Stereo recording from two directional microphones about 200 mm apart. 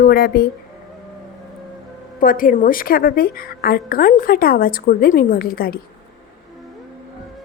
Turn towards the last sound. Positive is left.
turn(degrees=50)  # may be behind; listen again after turning